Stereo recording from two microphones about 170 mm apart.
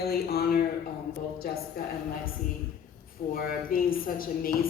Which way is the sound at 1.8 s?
60° left (ahead or behind).